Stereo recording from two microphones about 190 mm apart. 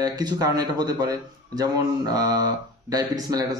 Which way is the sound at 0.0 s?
20° right (ahead or behind).